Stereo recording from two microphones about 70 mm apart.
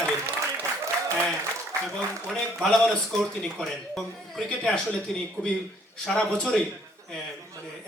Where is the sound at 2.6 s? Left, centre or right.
Centre.